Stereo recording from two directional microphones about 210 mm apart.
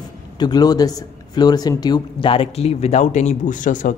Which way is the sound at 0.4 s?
20° left (ahead or behind).